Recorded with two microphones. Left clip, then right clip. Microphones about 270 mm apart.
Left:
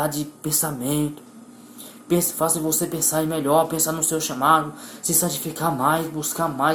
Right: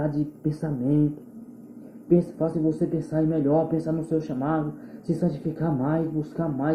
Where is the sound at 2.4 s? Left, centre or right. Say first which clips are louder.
Left 2 dB; left.